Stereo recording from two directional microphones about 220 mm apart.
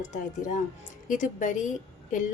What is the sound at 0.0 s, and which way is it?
A woman's voice, 35° left (ahead or behind).